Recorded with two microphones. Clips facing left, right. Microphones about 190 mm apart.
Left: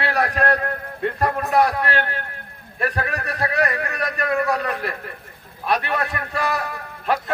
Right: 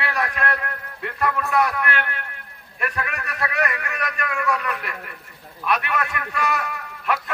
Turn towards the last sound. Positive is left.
turn(degrees=35)  # may be behind; listen again after turning